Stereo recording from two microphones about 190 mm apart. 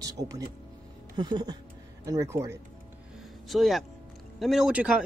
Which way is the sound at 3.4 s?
Centre (ahead or behind).